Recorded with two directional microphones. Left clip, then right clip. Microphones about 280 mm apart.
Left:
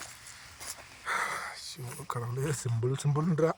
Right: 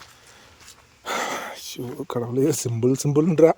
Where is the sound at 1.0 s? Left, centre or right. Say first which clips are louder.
Right 5 dB; right.